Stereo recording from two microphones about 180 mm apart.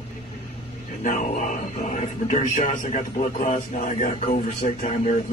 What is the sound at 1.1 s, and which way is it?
Speech, 45° left (ahead or behind).